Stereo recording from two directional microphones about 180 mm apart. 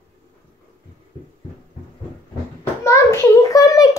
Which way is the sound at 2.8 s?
15° left (ahead or behind).